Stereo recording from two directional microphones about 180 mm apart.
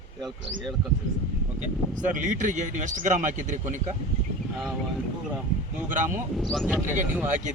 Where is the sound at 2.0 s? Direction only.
45° right (ahead or behind).